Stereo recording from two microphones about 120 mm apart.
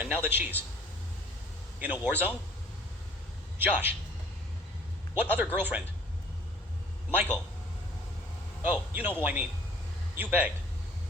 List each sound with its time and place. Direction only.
0.0 s a man's voice: 15° right (ahead or behind)
1.8 s a man's voice: 15° right (ahead or behind)
3.6 s a man's voice: 15° right (ahead or behind)
5.1 s a man's voice: 15° right (ahead or behind)
7.1 s a man's voice: 15° right (ahead or behind)
8.6 s a man's voice: 15° right (ahead or behind)